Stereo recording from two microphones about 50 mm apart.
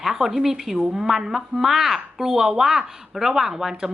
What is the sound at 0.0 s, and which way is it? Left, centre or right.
A woman's voice, centre.